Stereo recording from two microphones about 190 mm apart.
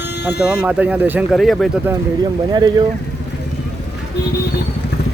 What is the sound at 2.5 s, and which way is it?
Speech, 20° right (ahead or behind).